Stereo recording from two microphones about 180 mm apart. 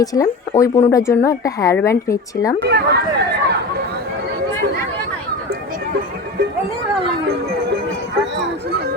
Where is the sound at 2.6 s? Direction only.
65° right (ahead or behind).